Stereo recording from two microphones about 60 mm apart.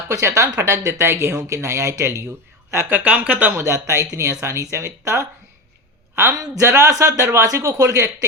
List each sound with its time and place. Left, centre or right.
0.1 s speech: right
2.9 s speech: right
3.5 s speech: right
6.6 s speech: right